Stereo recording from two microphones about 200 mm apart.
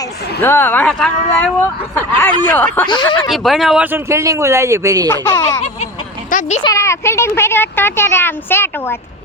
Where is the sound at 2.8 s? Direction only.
25° left (ahead or behind).